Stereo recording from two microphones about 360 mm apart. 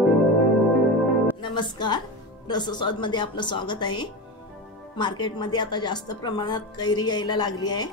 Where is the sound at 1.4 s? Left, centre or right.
Centre.